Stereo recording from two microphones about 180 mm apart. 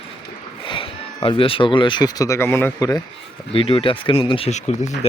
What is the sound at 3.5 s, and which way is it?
Speech, 30° left (ahead or behind).